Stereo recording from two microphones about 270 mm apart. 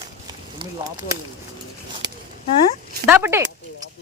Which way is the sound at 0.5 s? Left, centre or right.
Centre.